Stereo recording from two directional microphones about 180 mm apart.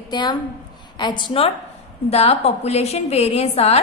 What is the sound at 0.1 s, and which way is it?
A woman's voice, 25° left (ahead or behind).